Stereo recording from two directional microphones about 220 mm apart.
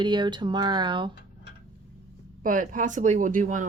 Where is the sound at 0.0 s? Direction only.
20° right (ahead or behind).